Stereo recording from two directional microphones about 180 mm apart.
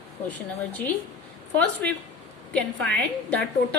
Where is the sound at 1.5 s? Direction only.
5° left (ahead or behind).